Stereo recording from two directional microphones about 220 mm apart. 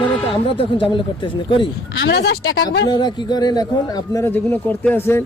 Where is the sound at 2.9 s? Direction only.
20° left (ahead or behind).